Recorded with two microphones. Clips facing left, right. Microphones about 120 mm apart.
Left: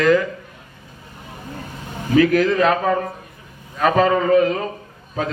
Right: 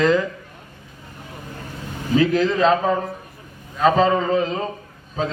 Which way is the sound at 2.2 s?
25° right (ahead or behind).